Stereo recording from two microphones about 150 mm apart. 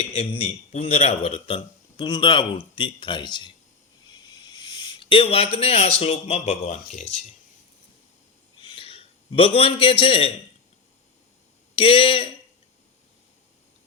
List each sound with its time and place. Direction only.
0.1 s a man's voice: 40° left (ahead or behind)
8.5 s a sound: 35° left (ahead or behind)
11.7 s a man's voice: 40° left (ahead or behind)